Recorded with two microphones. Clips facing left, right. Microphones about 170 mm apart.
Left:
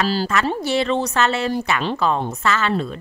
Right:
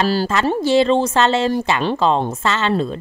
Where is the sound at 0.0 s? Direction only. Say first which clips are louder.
Right 3 dB; 30° right (ahead or behind).